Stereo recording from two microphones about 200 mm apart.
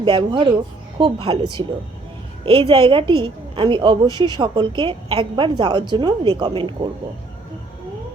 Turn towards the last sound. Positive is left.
turn(degrees=-25)  # may be behind; listen again after turning